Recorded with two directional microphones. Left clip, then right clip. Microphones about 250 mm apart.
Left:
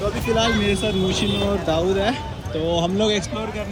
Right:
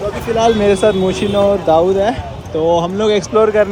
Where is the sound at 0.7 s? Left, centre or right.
Centre.